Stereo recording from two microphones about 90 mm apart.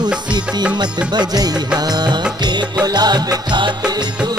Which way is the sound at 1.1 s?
50° right (ahead or behind).